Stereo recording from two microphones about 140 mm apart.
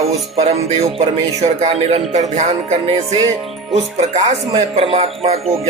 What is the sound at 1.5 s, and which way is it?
Speech, 55° right (ahead or behind).